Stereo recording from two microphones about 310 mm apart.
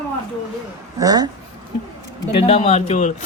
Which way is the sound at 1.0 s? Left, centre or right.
Centre.